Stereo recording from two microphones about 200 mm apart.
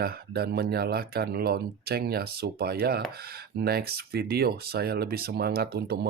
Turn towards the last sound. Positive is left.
turn(degrees=-50)  # may be behind; listen again after turning